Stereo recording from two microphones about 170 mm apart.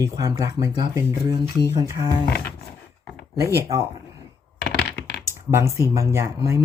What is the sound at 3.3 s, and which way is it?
Speech, 15° right (ahead or behind).